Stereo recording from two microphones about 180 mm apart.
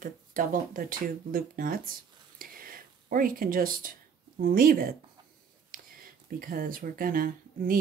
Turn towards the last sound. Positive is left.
turn(degrees=-50)  # may be behind; listen again after turning